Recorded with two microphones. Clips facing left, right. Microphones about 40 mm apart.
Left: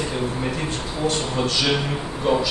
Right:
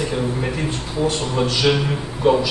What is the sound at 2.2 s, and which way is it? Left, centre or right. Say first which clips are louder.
Speech: right 4 dB; centre.